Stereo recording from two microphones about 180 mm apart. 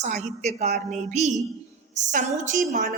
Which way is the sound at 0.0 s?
40° right (ahead or behind).